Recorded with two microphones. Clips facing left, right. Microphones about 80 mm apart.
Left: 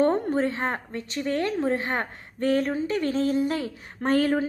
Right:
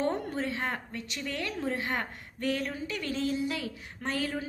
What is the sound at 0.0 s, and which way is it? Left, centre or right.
A woman's voice, left.